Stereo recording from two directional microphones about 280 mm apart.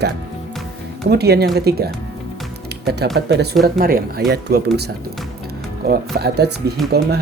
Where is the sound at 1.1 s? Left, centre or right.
Right.